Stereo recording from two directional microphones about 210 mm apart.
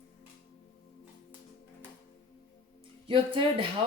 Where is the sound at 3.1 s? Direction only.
25° right (ahead or behind).